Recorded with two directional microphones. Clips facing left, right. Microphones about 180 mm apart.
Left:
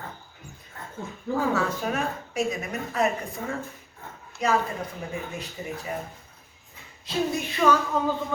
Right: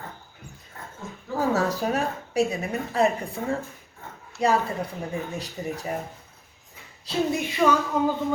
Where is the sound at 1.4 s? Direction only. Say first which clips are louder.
Right 3 dB; 40° right (ahead or behind).